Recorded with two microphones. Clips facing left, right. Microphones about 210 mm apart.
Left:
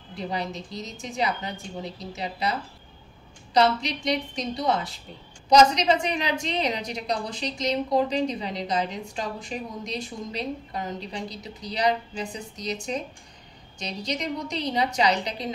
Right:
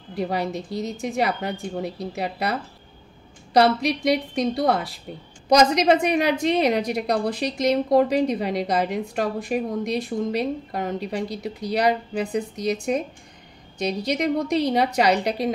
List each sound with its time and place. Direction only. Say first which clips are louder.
0.1 s a woman's voice: right 6 dB; 60° right (ahead or behind)
3.5 s a woman's voice: right 4 dB; 60° right (ahead or behind)